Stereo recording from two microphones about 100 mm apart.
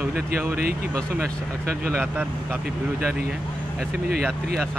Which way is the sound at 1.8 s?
20° right (ahead or behind).